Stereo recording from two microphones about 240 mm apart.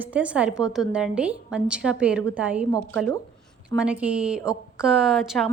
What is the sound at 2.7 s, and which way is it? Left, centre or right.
Speech, centre.